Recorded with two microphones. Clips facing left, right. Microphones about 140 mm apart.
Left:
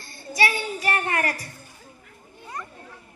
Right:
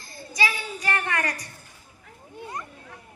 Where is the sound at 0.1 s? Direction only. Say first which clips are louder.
Left 3 dB; 30° left (ahead or behind).